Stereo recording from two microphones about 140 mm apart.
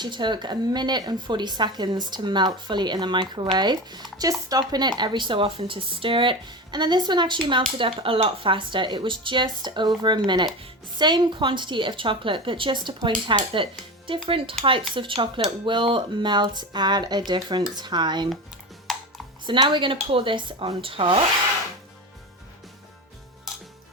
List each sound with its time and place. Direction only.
0.0 s a woman's voice: 35° right (ahead or behind)
18.9 s music: centre (ahead or behind)
19.5 s a woman's voice: 35° right (ahead or behind)